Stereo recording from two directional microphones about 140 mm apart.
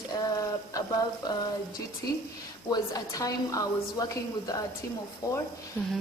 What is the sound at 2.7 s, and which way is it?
A woman's voice, 30° left (ahead or behind).